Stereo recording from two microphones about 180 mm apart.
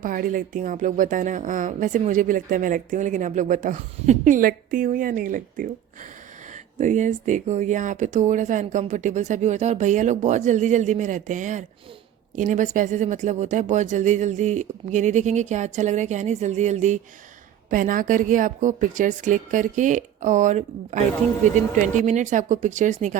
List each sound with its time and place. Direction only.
0.0 s a woman's voice: 50° right (ahead or behind)